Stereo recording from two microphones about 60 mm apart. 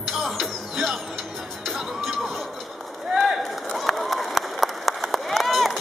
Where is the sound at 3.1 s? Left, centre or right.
Centre.